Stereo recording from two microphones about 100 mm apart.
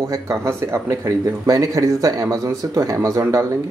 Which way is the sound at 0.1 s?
30° right (ahead or behind).